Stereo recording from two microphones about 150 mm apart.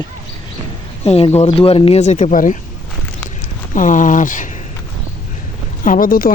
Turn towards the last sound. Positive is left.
turn(degrees=70)  # may be behind; listen again after turning